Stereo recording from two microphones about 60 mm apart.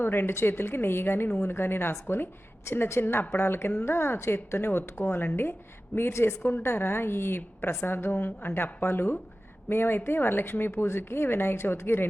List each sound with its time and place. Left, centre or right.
0.0 s a woman's voice: left